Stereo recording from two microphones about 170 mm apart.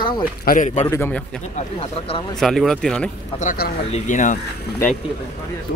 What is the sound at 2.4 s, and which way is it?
Speech, centre (ahead or behind).